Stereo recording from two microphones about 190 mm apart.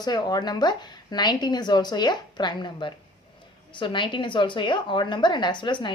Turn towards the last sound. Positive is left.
turn(degrees=25)  # may be behind; listen again after turning